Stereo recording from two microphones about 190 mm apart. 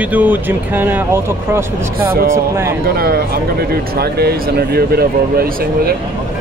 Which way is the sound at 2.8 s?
55° right (ahead or behind).